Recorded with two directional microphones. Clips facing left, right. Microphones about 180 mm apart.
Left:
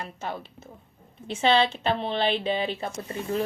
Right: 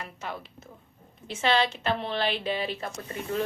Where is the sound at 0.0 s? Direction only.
30° left (ahead or behind).